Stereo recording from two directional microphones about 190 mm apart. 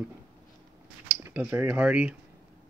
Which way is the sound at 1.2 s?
10° right (ahead or behind).